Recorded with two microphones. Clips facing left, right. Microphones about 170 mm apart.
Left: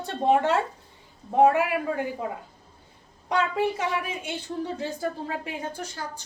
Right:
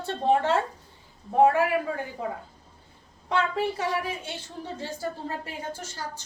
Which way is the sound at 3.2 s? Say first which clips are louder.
Left 2 dB; 15° left (ahead or behind).